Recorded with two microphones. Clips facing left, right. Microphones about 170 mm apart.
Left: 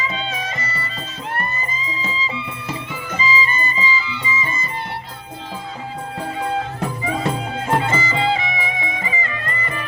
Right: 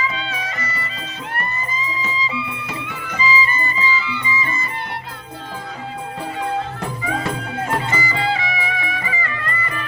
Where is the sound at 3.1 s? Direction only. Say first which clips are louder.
Right 1 dB; 20° left (ahead or behind).